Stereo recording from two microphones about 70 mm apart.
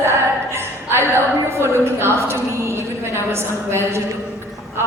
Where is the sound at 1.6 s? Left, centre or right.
Right.